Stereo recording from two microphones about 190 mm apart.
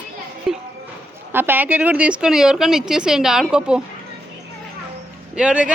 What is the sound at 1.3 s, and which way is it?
A woman's voice, 10° right (ahead or behind).